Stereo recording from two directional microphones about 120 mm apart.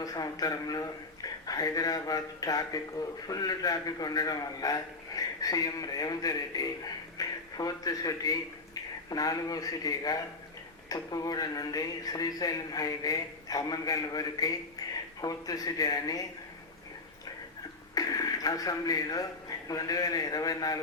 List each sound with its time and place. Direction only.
0.0 s a man's voice: 30° left (ahead or behind)
17.9 s speech: 30° left (ahead or behind)